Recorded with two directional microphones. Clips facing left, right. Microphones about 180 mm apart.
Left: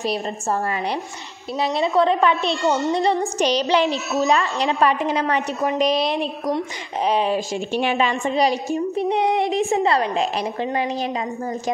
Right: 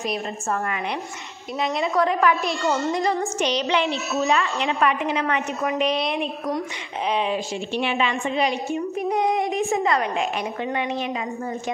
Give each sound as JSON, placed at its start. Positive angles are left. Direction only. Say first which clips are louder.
{"t": 0.0, "sound": "a woman's voice", "louder": "left 3 dB", "side_deg": 35}